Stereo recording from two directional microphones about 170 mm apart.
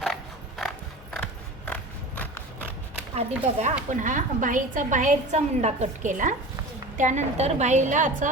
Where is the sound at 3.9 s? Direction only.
50° right (ahead or behind).